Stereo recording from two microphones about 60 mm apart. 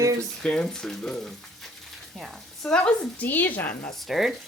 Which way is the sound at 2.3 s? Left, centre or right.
Centre.